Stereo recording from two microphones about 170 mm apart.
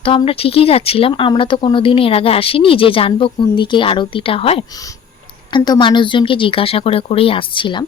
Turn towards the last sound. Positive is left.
turn(degrees=30)  # may be behind; listen again after turning